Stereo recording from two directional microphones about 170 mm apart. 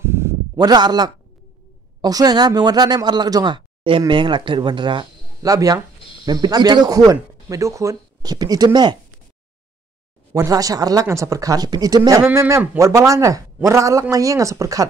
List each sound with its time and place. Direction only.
0.0 s a sound: 15° right (ahead or behind)
2.0 s speech: 20° right (ahead or behind)
10.3 s speech: 20° right (ahead or behind)
12.2 s a man's voice: 10° right (ahead or behind)